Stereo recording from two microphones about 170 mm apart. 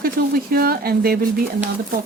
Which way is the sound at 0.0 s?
65° right (ahead or behind).